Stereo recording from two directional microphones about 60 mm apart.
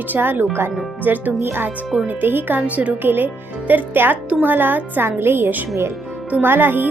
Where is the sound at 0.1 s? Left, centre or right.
Right.